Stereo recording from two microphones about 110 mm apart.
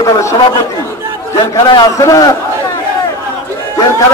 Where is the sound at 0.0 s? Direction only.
25° left (ahead or behind).